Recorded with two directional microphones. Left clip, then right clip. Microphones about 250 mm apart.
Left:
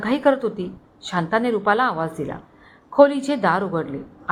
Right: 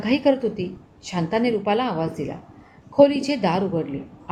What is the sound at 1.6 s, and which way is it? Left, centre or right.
Speech, centre.